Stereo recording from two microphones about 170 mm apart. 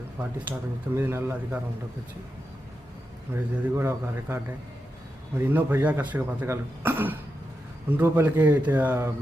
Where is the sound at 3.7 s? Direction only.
15° right (ahead or behind).